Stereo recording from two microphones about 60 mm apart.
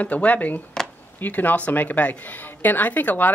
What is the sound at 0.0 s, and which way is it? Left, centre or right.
A woman's voice, left.